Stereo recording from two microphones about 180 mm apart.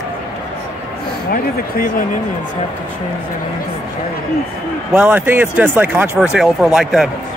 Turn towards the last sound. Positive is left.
turn(degrees=0)  # may be behind; listen again after turning